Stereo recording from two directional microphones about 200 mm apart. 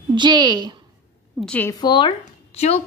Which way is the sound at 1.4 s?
5° left (ahead or behind).